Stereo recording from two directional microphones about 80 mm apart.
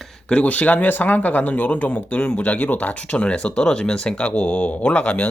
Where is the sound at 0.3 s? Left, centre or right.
Centre.